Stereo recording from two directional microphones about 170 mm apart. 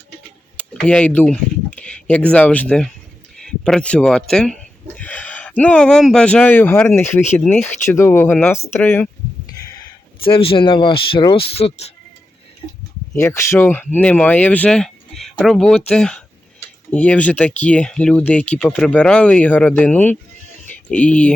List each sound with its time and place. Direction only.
0.8 s a sound: 5° left (ahead or behind)
2.3 s speech: 10° left (ahead or behind)
10.2 s speech: 30° left (ahead or behind)
13.1 s speech: 15° left (ahead or behind)